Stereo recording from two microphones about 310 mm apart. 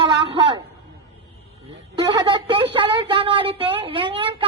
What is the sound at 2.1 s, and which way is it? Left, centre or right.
A woman's voice, centre.